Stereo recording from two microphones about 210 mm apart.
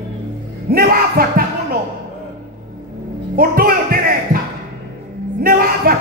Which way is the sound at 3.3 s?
45° right (ahead or behind).